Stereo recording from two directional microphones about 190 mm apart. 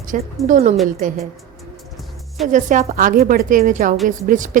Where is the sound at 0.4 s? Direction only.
40° right (ahead or behind).